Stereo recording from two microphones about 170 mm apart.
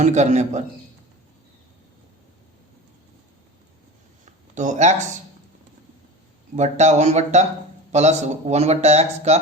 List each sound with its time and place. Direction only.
0.0 s speech: 45° right (ahead or behind)
4.3 s speech: 45° right (ahead or behind)
6.6 s speech: 45° right (ahead or behind)